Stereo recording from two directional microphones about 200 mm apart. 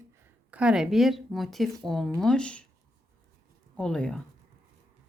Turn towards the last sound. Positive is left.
turn(degrees=5)  # may be behind; listen again after turning